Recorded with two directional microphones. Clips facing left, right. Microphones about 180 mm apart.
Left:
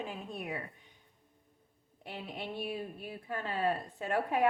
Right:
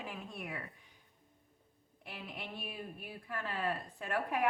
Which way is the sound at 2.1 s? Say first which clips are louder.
Left 5 dB; 25° left (ahead or behind).